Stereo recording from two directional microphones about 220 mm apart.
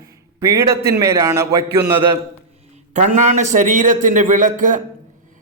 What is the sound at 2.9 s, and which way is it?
A man's voice, 35° right (ahead or behind).